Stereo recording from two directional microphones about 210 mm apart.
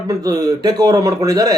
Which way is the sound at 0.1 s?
15° right (ahead or behind).